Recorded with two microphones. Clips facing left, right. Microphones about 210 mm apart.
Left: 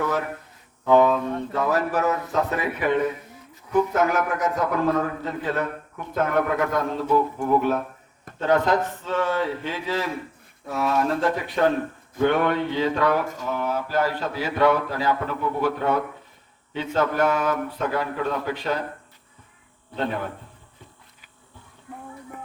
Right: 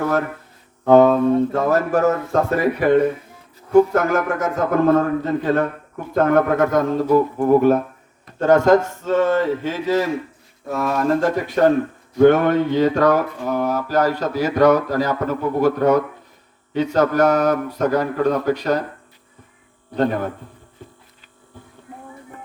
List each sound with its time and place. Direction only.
0.0 s a sound: 50° right (ahead or behind)
0.9 s a man's voice: 45° right (ahead or behind)
19.9 s a man's voice: 45° right (ahead or behind)